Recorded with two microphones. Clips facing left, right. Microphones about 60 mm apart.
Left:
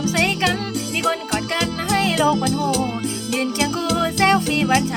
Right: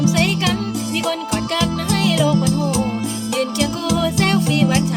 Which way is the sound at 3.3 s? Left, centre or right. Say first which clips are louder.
Right 1 dB; left.